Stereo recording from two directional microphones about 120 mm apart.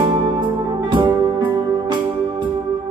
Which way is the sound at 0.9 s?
40° right (ahead or behind).